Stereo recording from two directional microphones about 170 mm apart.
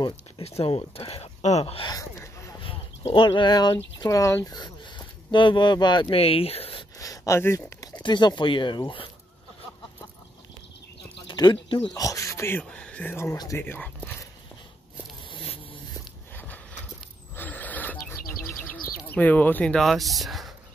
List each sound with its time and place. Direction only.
0.4 s speech: 35° left (ahead or behind)
1.9 s a sound: 20° left (ahead or behind)
2.6 s speech: 30° left (ahead or behind)
7.0 s speech: 20° left (ahead or behind)
11.2 s speech: 25° left (ahead or behind); by 14.1 s 10° left (ahead or behind)
15.2 s a sound: 30° left (ahead or behind)
17.4 s a sound: 10° left (ahead or behind)
17.9 s bird: 15° left (ahead or behind)
19.0 s speech: 10° left (ahead or behind)